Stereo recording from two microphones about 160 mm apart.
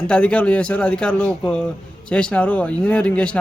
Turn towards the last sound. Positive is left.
turn(degrees=5)  # may be behind; listen again after turning